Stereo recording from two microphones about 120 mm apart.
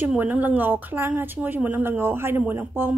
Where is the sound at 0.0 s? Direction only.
15° right (ahead or behind).